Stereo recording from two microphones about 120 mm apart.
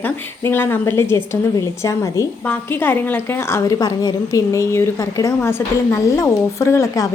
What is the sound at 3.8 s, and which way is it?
Speech, 30° left (ahead or behind).